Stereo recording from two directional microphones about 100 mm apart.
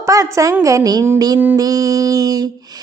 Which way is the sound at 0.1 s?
35° right (ahead or behind).